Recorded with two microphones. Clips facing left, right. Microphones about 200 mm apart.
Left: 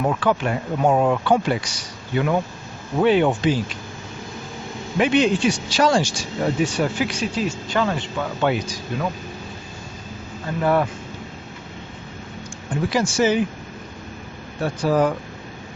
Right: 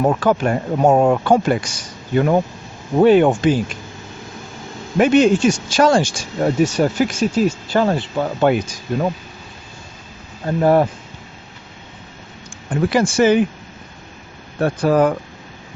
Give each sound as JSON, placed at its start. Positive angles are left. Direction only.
{"t": 0.0, "sound": "speech", "side_deg": -45}
{"t": 4.9, "sound": "speech", "side_deg": -45}
{"t": 10.4, "sound": "speech", "side_deg": -40}
{"t": 12.7, "sound": "speech", "side_deg": -55}
{"t": 14.6, "sound": "speech", "side_deg": -55}